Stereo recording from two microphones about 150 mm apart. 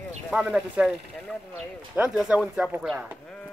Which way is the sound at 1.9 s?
5° right (ahead or behind).